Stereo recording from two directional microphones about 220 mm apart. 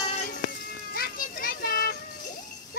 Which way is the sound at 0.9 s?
40° left (ahead or behind).